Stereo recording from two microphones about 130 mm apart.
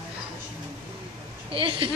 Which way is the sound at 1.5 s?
40° right (ahead or behind).